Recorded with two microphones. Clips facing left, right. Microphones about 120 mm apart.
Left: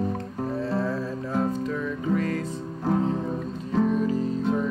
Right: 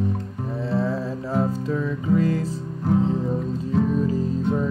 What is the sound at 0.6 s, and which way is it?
Music, 25° right (ahead or behind).